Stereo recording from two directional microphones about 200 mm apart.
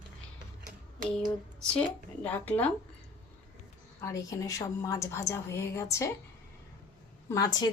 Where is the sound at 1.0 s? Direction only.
5° left (ahead or behind).